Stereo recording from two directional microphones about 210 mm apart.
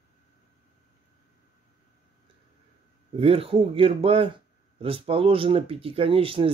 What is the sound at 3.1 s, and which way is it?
Speech, 25° right (ahead or behind).